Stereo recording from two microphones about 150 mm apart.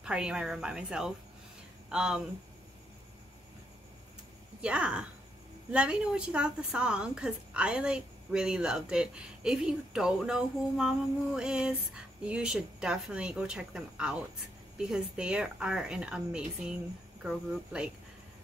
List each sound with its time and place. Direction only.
0.0 s a woman's voice: 5° right (ahead or behind)
4.6 s a woman's voice: 5° right (ahead or behind)